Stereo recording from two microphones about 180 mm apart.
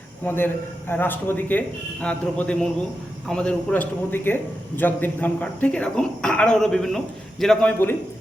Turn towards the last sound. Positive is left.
turn(degrees=10)  # may be behind; listen again after turning